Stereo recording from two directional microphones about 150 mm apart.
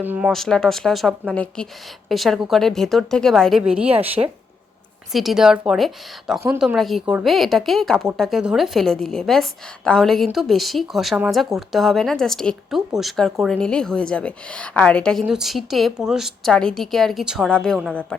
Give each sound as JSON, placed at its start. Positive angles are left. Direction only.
{"t": 0.0, "sound": "speech", "side_deg": -10}
{"t": 0.3, "sound": "a woman's voice", "side_deg": 5}
{"t": 4.2, "sound": "speech", "side_deg": -25}
{"t": 5.1, "sound": "a woman's voice", "side_deg": 0}